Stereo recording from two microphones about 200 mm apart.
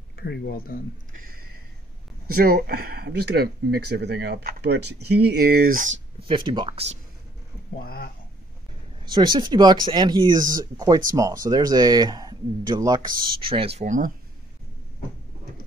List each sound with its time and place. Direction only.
0.2 s speech: 55° left (ahead or behind)
2.2 s speech: 45° right (ahead or behind)
6.2 s speech: 25° right (ahead or behind)
7.8 s speech: 50° left (ahead or behind)
9.0 s speech: 20° right (ahead or behind); by 14.1 s 40° right (ahead or behind)